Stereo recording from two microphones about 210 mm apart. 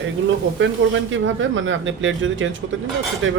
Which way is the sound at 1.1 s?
65° right (ahead or behind).